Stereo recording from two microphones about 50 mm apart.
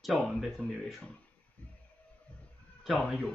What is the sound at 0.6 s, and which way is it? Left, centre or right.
Speech, left.